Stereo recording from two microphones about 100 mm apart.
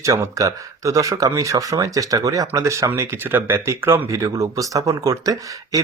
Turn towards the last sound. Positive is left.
turn(degrees=-35)  # may be behind; listen again after turning